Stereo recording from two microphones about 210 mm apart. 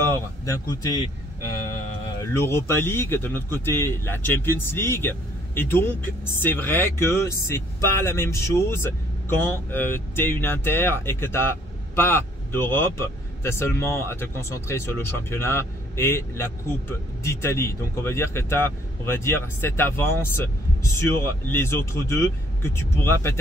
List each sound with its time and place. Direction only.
0.0 s speech: 15° left (ahead or behind)
2.3 s a man's voice: 10° left (ahead or behind)